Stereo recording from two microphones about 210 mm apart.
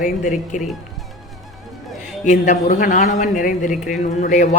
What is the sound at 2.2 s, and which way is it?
A woman's voice, 35° left (ahead or behind).